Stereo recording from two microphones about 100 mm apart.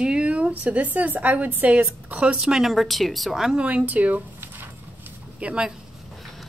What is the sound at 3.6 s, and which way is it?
A woman's voice, 15° right (ahead or behind).